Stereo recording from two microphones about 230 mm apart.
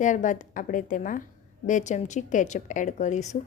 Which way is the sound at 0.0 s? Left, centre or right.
Left.